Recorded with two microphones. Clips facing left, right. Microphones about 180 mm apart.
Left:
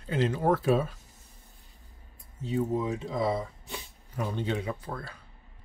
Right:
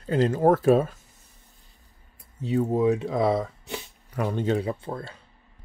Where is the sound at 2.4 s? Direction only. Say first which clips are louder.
Right 7 dB; 65° right (ahead or behind).